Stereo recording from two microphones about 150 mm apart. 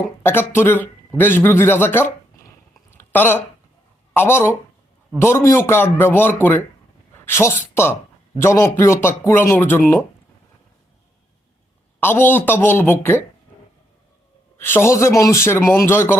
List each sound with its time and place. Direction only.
0.2 s speech: 15° left (ahead or behind)
2.9 s a sound: 15° left (ahead or behind)
4.1 s speech: 15° left (ahead or behind)
11.9 s speech: 15° left (ahead or behind)
14.6 s speech: 15° left (ahead or behind)